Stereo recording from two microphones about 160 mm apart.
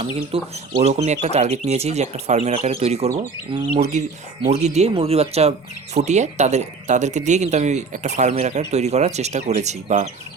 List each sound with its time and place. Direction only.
0.3 s speech: 35° right (ahead or behind)